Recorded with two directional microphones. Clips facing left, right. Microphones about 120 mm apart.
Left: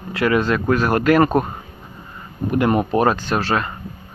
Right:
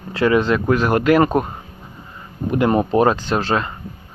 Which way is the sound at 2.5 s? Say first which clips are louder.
Right 1 dB; 25° right (ahead or behind).